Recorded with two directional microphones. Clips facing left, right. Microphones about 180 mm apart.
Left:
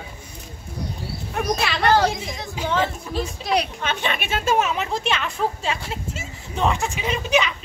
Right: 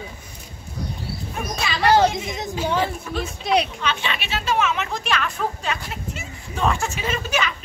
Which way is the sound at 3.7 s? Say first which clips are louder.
Left 1 dB; 50° left (ahead or behind).